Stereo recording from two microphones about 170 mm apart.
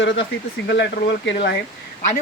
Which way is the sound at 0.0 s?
90° left.